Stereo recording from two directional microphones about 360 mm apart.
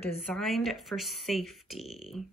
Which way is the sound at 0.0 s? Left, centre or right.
Centre.